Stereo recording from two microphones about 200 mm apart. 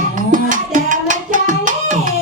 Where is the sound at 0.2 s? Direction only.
40° right (ahead or behind).